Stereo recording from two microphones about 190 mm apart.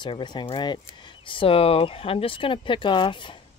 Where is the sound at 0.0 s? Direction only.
25° left (ahead or behind).